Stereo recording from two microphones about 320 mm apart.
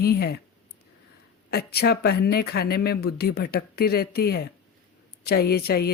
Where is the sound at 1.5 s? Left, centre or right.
Left.